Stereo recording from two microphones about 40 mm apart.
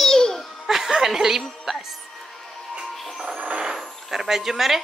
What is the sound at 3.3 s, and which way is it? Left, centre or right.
Vehicle, right.